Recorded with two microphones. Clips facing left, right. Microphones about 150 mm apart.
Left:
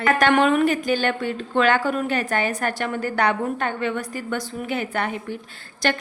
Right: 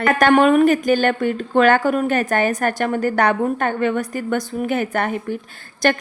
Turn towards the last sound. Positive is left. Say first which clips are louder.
# right 5 dB
turn(degrees=-45)  # may be behind; listen again after turning